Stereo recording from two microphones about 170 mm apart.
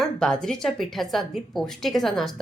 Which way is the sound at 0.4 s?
Centre (ahead or behind).